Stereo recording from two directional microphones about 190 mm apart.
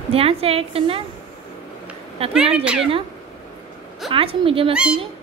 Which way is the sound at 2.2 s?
30° right (ahead or behind).